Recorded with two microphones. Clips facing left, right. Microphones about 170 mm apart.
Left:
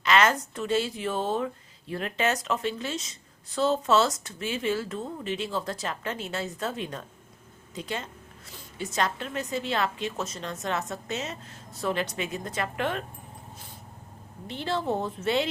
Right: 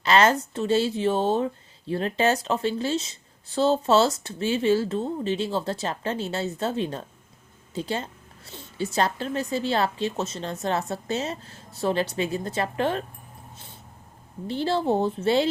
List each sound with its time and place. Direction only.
0.0 s a woman's voice: 30° right (ahead or behind)
14.4 s a woman's voice: 35° right (ahead or behind)